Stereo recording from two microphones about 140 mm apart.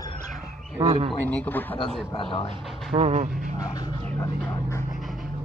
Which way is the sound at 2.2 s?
45° left (ahead or behind).